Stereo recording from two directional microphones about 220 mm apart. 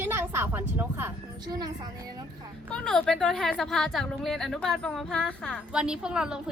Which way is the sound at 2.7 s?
5° left (ahead or behind).